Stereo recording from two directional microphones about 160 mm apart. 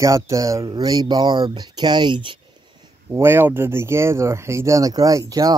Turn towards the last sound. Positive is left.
turn(degrees=-20)  # may be behind; listen again after turning